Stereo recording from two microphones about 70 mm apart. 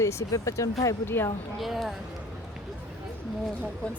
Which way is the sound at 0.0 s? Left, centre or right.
Left.